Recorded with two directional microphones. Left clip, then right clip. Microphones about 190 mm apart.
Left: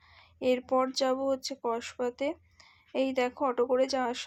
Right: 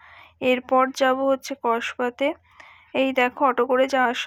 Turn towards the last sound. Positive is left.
turn(degrees=-15)  # may be behind; listen again after turning